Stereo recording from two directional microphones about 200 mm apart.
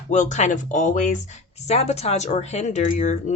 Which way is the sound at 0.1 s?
35° left (ahead or behind).